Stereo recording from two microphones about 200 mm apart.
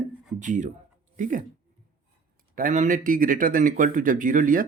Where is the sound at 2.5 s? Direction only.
40° right (ahead or behind).